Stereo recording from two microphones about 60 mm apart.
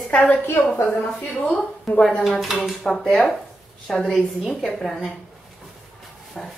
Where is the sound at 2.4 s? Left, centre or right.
Centre.